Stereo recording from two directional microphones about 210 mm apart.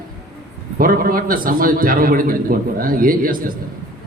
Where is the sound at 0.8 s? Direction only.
45° right (ahead or behind).